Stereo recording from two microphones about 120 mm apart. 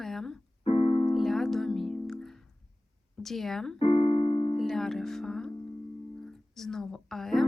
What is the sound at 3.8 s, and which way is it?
Music, 45° left (ahead or behind).